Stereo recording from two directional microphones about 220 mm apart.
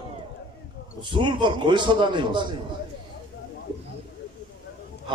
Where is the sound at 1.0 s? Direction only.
20° right (ahead or behind).